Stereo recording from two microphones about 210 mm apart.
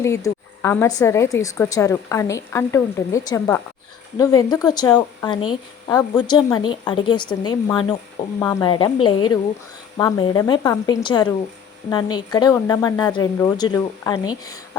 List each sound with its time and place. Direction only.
0.0 s a woman's voice: 15° left (ahead or behind)